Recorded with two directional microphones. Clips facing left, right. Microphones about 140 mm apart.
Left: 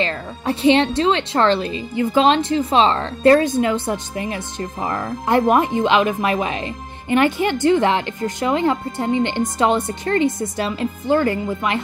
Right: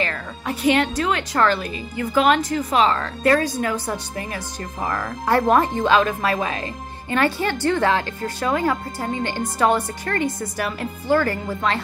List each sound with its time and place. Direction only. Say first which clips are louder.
0.0 s speech: left 4 dB; 25° left (ahead or behind)